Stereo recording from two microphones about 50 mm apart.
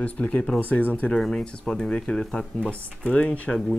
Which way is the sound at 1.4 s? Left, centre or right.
Centre.